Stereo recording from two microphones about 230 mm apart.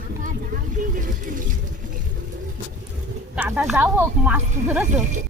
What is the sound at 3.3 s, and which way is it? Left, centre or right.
Speech, centre.